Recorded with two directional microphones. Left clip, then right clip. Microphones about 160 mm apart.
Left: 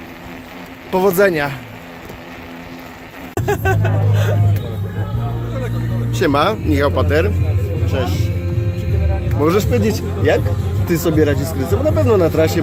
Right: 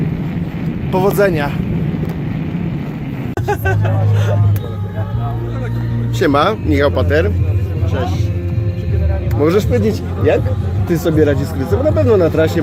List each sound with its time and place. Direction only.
0.9 s speech: 5° left (ahead or behind)
3.4 s speech: 20° left (ahead or behind)
6.1 s speech: 20° right (ahead or behind)
9.4 s speech: 15° right (ahead or behind)